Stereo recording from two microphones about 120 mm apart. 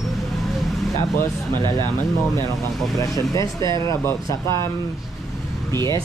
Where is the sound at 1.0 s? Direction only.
20° left (ahead or behind).